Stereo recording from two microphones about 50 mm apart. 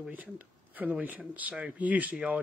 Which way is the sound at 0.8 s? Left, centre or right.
Right.